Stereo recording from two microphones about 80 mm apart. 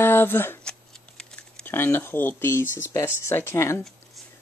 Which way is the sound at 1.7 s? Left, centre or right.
Left.